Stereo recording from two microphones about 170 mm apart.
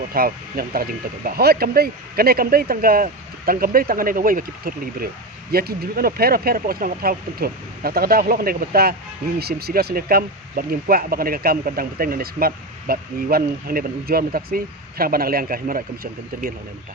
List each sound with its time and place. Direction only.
0.1 s speech: 60° right (ahead or behind)